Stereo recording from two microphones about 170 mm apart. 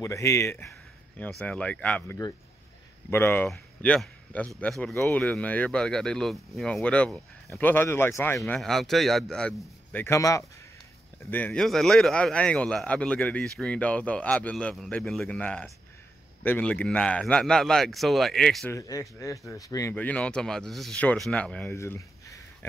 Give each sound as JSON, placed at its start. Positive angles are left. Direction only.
{"t": 0.0, "sound": "speech", "side_deg": 20}
{"t": 8.4, "sound": "speech", "side_deg": 0}
{"t": 18.7, "sound": "speech", "side_deg": 20}